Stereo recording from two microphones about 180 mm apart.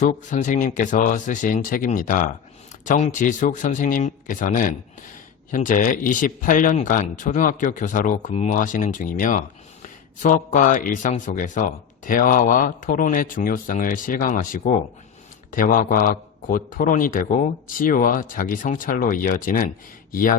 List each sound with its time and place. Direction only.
0.3 s speech: 45° left (ahead or behind)